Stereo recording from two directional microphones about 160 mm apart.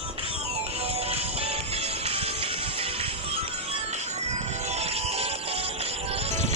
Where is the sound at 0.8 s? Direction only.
40° right (ahead or behind).